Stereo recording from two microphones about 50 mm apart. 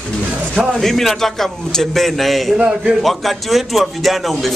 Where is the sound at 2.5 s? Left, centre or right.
Centre.